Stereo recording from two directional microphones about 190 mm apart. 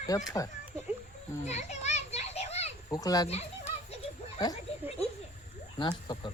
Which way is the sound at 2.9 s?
20° left (ahead or behind).